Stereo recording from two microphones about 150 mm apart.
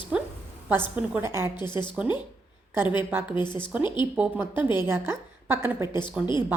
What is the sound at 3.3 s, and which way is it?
Speech, 30° left (ahead or behind).